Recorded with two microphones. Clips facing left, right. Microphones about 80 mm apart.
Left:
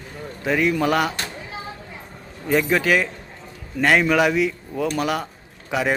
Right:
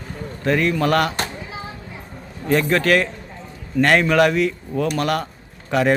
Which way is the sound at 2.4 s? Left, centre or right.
Centre.